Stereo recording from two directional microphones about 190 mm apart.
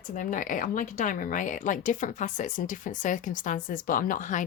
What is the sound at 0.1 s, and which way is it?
Speech, 45° left (ahead or behind).